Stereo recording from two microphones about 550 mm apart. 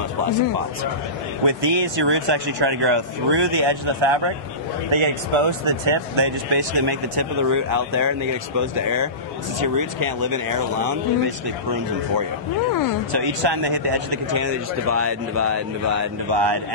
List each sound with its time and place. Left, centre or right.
1.4 s speech: right
13.1 s speech: right
14.3 s speech: right
16.3 s speech: right